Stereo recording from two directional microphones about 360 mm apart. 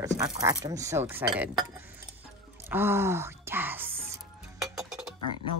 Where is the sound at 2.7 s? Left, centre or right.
Centre.